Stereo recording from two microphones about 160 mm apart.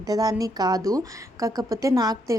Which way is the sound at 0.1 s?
25° right (ahead or behind).